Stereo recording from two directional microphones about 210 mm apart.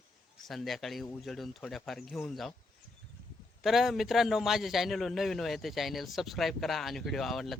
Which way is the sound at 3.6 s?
Centre (ahead or behind).